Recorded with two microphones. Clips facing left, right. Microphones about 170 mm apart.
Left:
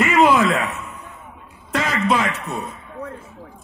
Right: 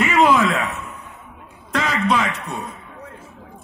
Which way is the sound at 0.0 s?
Centre (ahead or behind).